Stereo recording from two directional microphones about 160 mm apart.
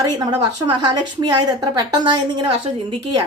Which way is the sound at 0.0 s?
25° right (ahead or behind).